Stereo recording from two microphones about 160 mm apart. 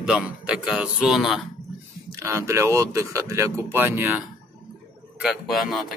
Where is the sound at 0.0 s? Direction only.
5° right (ahead or behind).